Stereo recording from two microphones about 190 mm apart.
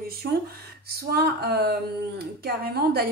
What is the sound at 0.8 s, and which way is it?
Speech, 55° right (ahead or behind).